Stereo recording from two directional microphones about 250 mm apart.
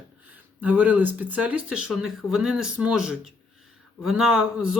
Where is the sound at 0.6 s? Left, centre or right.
Centre.